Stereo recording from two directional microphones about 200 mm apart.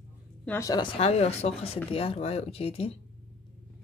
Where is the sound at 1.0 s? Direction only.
30° left (ahead or behind).